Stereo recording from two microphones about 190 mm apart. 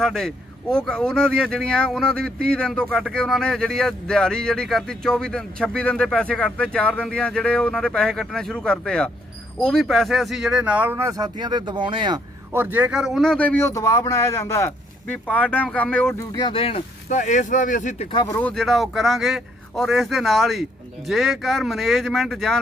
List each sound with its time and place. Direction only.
0.0 s speech: centre (ahead or behind); by 12.2 s 25° right (ahead or behind)
12.5 s speech: 10° right (ahead or behind); by 18.1 s 40° left (ahead or behind)
18.1 s speech: 20° left (ahead or behind)
18.3 s speech: 5° left (ahead or behind)